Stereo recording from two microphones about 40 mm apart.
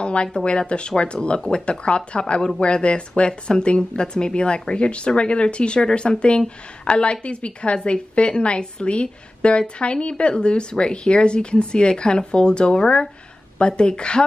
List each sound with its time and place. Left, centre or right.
0.0 s a woman's voice: left